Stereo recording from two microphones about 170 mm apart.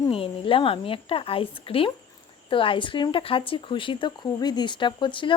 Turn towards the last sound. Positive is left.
turn(degrees=30)  # may be behind; listen again after turning